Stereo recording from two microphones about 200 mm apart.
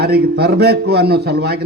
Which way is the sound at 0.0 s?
50° right (ahead or behind).